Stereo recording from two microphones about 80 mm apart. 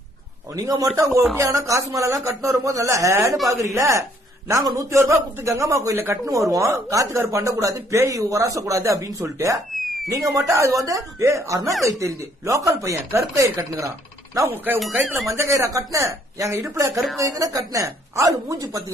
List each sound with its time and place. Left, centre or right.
0.6 s speech: right
14.5 s speech: right
15.1 s speech: right